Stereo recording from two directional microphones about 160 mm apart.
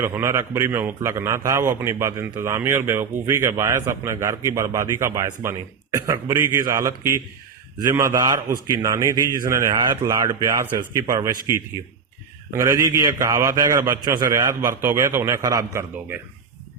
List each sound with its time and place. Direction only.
0.0 s a man's voice: 15° right (ahead or behind)